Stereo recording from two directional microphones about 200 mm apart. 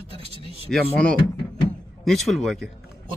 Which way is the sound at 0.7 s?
5° left (ahead or behind).